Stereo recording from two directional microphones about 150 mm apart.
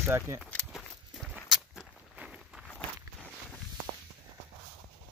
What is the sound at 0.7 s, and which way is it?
Walk, centre (ahead or behind).